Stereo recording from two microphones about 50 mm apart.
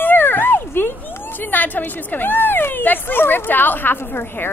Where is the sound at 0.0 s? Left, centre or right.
Left.